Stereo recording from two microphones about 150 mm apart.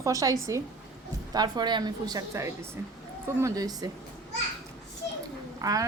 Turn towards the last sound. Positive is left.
turn(degrees=-25)  # may be behind; listen again after turning